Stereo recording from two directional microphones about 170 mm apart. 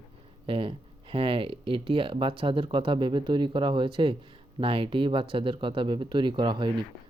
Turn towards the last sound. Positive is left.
turn(degrees=-25)  # may be behind; listen again after turning